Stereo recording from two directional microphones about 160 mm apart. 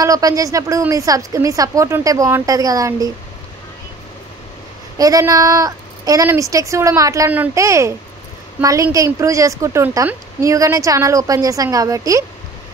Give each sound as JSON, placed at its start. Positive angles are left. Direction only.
{"t": 0.0, "sound": "a woman's voice", "side_deg": -20}
{"t": 4.9, "sound": "a woman's voice", "side_deg": -20}